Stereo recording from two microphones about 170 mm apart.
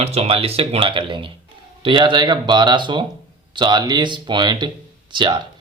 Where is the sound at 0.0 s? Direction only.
35° right (ahead or behind).